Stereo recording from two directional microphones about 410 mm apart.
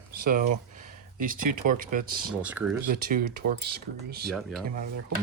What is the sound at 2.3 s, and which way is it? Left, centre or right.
Speech, centre.